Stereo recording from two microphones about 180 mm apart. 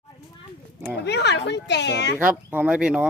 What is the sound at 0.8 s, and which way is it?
A woman's voice, 65° left (ahead or behind).